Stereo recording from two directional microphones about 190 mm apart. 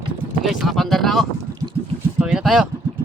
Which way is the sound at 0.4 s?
Centre (ahead or behind).